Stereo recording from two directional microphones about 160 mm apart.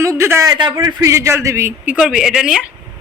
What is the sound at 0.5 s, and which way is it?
A man's voice, 30° right (ahead or behind).